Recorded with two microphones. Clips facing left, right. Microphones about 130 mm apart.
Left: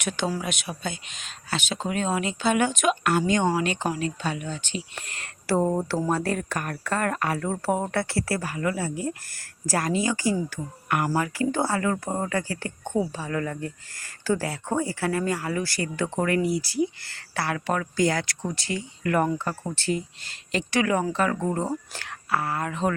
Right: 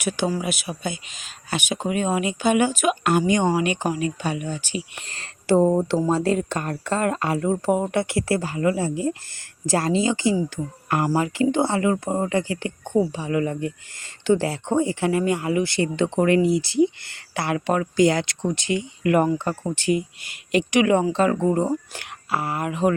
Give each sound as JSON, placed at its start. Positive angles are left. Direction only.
{"t": 0.0, "sound": "speech", "side_deg": -5}
{"t": 1.5, "sound": "speech", "side_deg": -15}
{"t": 3.0, "sound": "speech", "side_deg": -20}
{"t": 5.0, "sound": "a sound", "side_deg": -30}
{"t": 5.5, "sound": "speech", "side_deg": -20}
{"t": 21.4, "sound": "speech", "side_deg": -15}